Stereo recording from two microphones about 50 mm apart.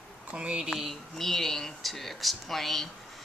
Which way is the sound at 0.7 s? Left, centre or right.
Centre.